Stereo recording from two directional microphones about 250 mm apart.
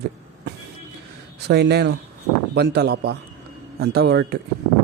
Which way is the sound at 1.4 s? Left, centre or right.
Right.